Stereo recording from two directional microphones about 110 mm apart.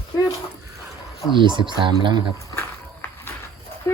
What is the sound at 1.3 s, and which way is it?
Speech, 45° right (ahead or behind).